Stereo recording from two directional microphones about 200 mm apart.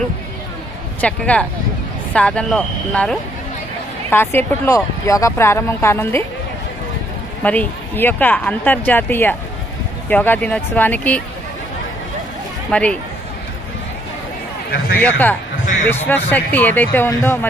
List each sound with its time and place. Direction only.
1.0 s speech: 5° left (ahead or behind)
7.4 s speech: 10° left (ahead or behind)
12.7 s speech: 5° left (ahead or behind)
14.7 s speech: 50° left (ahead or behind)
15.0 s speech: 10° left (ahead or behind)